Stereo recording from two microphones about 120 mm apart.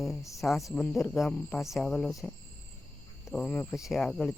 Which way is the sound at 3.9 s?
Centre (ahead or behind).